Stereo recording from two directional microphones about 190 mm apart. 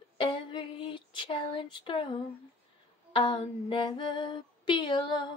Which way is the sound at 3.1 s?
25° left (ahead or behind).